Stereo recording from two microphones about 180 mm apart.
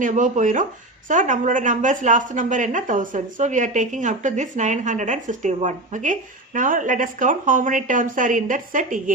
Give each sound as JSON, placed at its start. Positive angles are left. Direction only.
{"t": 0.0, "sound": "a woman's voice", "side_deg": -45}